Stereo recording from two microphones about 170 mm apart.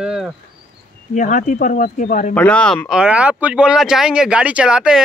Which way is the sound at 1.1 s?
50° left (ahead or behind).